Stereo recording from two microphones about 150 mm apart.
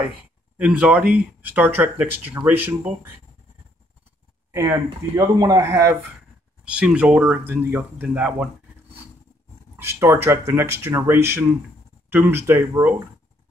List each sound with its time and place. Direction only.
0.6 s speech: 10° right (ahead or behind)
4.5 s speech: 15° right (ahead or behind)
6.6 s speech: 5° right (ahead or behind)
9.8 s speech: 15° right (ahead or behind)